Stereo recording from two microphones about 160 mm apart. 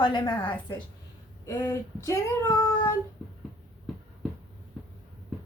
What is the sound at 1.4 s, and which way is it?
Speech, 20° left (ahead or behind).